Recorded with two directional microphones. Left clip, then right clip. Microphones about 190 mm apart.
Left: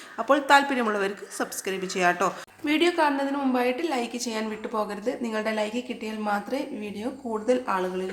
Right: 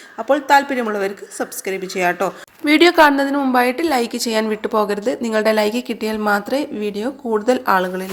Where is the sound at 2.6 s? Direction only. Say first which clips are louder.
Right 11 dB; 40° right (ahead or behind).